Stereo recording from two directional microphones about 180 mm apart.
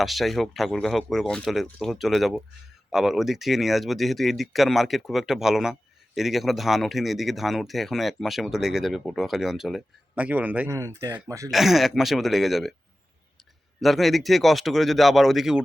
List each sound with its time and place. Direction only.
0.0 s speech: centre (ahead or behind); by 11.5 s 15° right (ahead or behind)
11.5 s speech: centre (ahead or behind)
13.8 s speech: centre (ahead or behind)